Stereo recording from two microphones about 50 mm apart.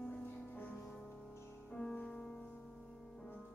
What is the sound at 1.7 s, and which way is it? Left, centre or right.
Music, centre.